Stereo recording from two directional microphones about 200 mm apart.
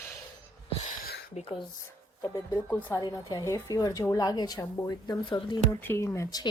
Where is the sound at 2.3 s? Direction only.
15° left (ahead or behind).